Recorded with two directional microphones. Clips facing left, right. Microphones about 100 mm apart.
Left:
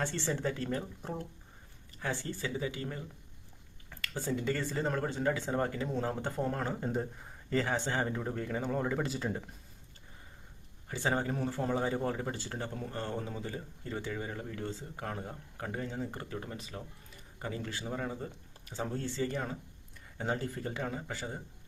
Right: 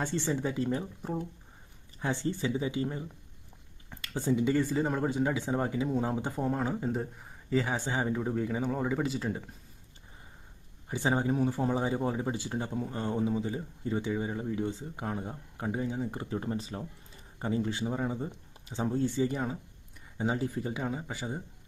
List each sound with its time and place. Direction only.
0.0 s speech: 15° right (ahead or behind)
2.0 s speech: 20° right (ahead or behind); by 9.4 s centre (ahead or behind)
10.8 s speech: 15° right (ahead or behind)
16.4 s speech: 30° right (ahead or behind); by 21.4 s 15° right (ahead or behind)